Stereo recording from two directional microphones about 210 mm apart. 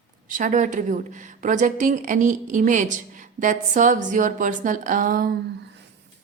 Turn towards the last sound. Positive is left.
turn(degrees=-45)  # may be behind; listen again after turning